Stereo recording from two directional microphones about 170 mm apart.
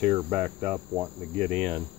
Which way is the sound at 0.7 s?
15° right (ahead or behind).